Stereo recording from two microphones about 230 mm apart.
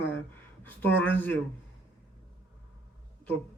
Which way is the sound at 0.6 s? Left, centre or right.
Centre.